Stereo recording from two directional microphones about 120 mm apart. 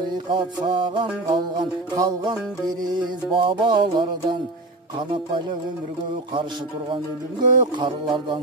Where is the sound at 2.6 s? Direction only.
Centre (ahead or behind).